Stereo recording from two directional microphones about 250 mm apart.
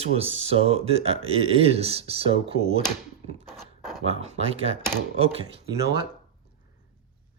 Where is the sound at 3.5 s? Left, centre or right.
Centre.